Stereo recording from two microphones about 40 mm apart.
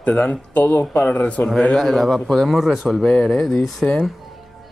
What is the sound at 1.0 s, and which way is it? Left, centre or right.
Speech, left.